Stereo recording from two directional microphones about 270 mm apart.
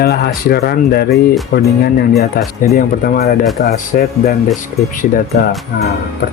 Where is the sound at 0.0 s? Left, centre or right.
Left.